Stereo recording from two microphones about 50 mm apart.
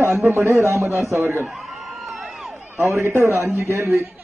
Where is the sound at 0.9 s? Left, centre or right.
Right.